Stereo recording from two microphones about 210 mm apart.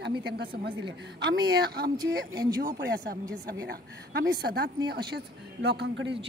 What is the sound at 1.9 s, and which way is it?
Speech, 20° right (ahead or behind).